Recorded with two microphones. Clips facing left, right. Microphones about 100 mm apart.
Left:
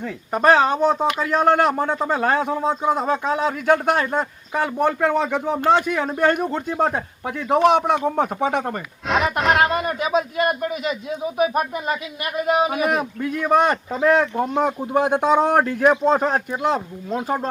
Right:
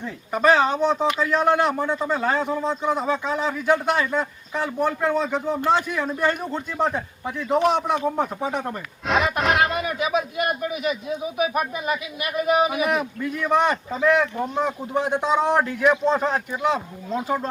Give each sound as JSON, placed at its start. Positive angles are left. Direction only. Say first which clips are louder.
{"t": 0.3, "sound": "a man's voice", "louder": "left 2 dB", "side_deg": 45}
{"t": 9.0, "sound": "music", "louder": "left 2 dB", "side_deg": 0}
{"t": 9.7, "sound": "speech", "louder": "left 2 dB", "side_deg": 40}
{"t": 11.3, "sound": "speech", "louder": "left 4 dB", "side_deg": 40}